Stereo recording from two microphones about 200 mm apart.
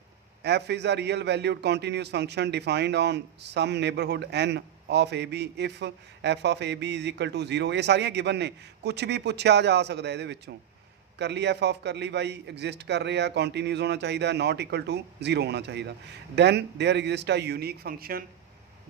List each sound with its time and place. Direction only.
0.4 s a man's voice: 55° right (ahead or behind)